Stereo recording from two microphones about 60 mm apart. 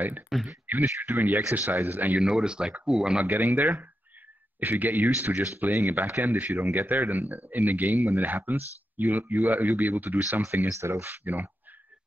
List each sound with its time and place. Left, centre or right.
0.3 s speech: centre
0.8 s speech: right
2.1 s speech: centre
3.3 s speech: right
10.7 s speech: right